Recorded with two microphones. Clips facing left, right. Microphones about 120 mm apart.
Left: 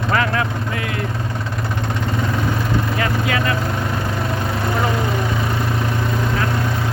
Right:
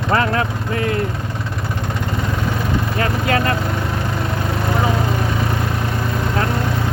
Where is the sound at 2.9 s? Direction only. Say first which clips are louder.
Right 2 dB; 35° right (ahead or behind).